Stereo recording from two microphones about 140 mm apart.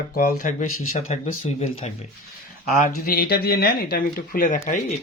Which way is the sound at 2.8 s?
90° left.